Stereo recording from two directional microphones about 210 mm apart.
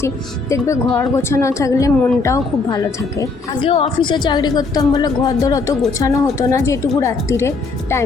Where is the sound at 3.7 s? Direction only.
25° left (ahead or behind).